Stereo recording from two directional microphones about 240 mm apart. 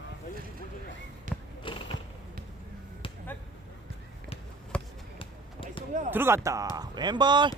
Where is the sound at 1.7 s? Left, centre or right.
Left.